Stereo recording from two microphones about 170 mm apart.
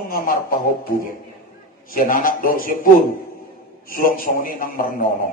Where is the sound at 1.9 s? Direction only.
55° left (ahead or behind).